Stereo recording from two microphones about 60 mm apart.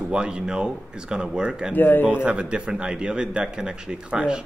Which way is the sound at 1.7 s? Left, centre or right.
Left.